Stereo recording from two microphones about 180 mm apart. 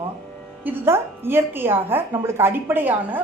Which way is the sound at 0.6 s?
15° right (ahead or behind).